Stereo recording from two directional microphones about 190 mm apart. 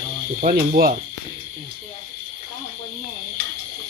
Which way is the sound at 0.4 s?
50° right (ahead or behind).